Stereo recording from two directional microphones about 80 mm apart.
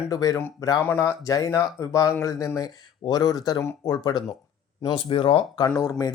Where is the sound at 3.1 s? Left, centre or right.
Left.